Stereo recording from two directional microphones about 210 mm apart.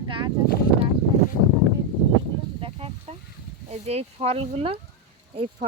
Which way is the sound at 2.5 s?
25° right (ahead or behind).